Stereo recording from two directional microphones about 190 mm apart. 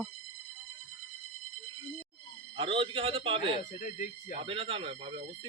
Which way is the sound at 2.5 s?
25° right (ahead or behind).